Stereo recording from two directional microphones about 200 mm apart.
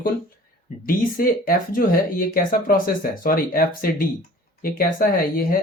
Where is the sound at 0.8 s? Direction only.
45° left (ahead or behind).